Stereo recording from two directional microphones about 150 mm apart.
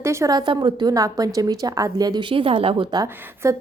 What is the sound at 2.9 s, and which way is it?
Speech, 25° right (ahead or behind).